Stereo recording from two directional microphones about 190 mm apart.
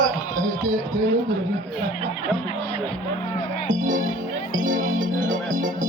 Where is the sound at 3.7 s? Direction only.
40° right (ahead or behind).